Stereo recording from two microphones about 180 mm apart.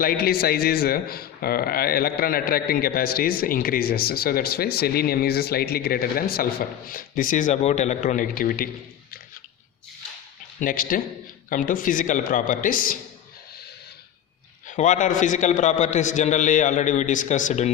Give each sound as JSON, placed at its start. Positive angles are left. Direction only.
{"t": 0.0, "sound": "a man's voice", "side_deg": 55}
{"t": 10.6, "sound": "a man's voice", "side_deg": 50}
{"t": 14.7, "sound": "a man's voice", "side_deg": 45}